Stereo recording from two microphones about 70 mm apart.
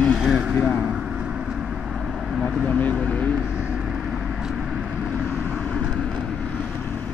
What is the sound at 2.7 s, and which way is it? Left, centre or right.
Speech, left.